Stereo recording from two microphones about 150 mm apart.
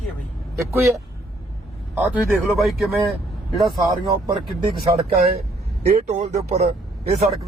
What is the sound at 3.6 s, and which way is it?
Speech, 30° right (ahead or behind).